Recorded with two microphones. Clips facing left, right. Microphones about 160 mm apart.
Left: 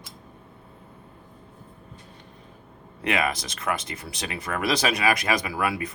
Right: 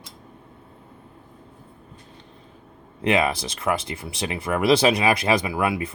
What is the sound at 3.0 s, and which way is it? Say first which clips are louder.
Speech: right 5 dB; 30° right (ahead or behind).